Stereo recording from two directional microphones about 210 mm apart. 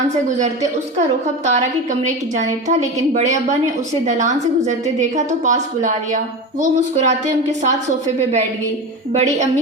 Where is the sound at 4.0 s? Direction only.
35° right (ahead or behind).